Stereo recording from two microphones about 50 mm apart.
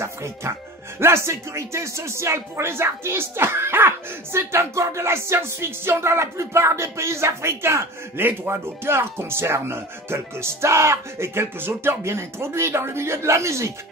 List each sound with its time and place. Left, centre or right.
0.0 s music: right
0.9 s speech: right